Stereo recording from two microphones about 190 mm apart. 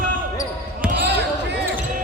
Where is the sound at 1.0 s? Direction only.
65° right (ahead or behind).